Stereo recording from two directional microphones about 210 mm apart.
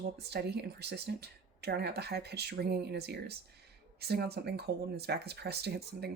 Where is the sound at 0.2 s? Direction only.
50° right (ahead or behind).